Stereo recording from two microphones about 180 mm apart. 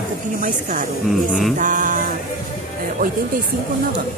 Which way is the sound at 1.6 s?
45° right (ahead or behind).